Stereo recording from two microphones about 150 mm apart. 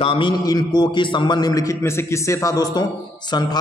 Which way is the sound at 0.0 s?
40° left (ahead or behind).